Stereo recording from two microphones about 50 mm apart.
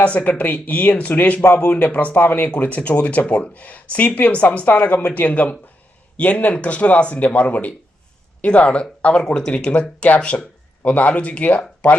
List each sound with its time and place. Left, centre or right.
0.0 s speech: left
9.2 s speech: centre
9.5 s speech: left